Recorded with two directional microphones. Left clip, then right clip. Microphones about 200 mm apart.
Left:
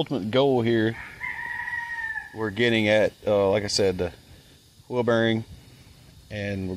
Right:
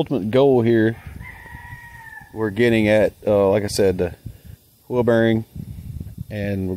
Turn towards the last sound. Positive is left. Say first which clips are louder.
# right 5 dB
turn(degrees=-50)  # may be behind; listen again after turning